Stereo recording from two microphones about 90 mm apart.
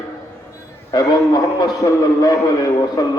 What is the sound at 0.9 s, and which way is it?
A man's voice, 50° left (ahead or behind).